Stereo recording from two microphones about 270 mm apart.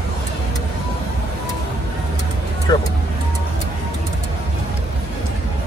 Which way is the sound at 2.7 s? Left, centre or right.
Centre.